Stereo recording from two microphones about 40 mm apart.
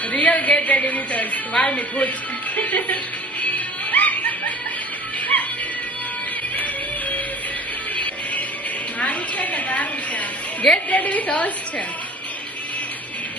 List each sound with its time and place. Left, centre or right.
0.1 s a woman's voice: left
3.9 s music: left
7.9 s music: left
9.0 s a sound: left
10.8 s a woman's voice: left